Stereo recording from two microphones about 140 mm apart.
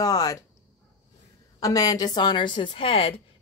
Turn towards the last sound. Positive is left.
turn(degrees=40)  # may be behind; listen again after turning